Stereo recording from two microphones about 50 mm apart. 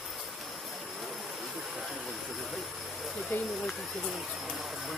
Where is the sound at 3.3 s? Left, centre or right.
Left.